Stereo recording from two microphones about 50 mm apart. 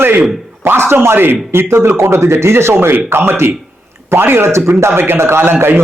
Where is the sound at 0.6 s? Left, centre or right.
Right.